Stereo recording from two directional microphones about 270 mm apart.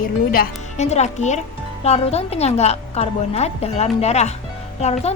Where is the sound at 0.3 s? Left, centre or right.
Left.